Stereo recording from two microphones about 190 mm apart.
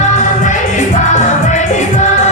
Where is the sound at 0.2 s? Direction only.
40° left (ahead or behind).